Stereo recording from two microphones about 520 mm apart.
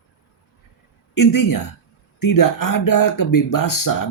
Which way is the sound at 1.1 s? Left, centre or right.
Left.